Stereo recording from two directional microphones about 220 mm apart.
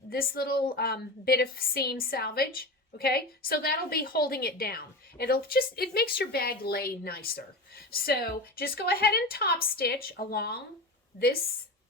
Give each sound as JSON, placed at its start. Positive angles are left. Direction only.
{"t": 0.1, "sound": "a woman's voice", "side_deg": 45}